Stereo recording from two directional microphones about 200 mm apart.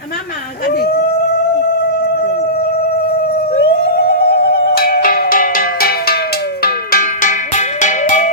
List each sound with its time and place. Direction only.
0.7 s speech: 50° left (ahead or behind)
3.5 s music: 55° left (ahead or behind)
6.6 s cowbell: 50° left (ahead or behind)